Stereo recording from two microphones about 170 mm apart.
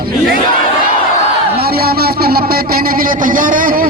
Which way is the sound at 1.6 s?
65° right (ahead or behind).